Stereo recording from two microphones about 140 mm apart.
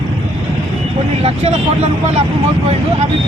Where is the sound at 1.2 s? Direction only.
50° right (ahead or behind).